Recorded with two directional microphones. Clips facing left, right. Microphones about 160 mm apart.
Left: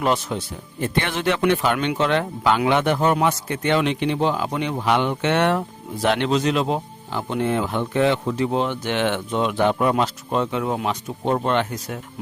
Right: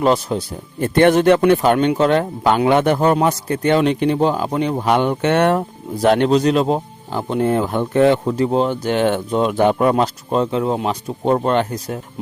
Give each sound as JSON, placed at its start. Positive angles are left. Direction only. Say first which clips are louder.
{"t": 0.0, "sound": "speech", "louder": "right 5 dB", "side_deg": -35}
{"t": 0.9, "sound": "speech", "louder": "right 11 dB", "side_deg": -50}